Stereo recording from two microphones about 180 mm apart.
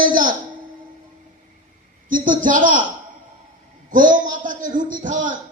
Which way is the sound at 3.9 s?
45° right (ahead or behind).